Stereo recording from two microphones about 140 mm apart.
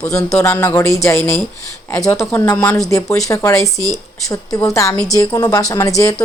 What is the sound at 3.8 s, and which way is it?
Speech, 30° right (ahead or behind).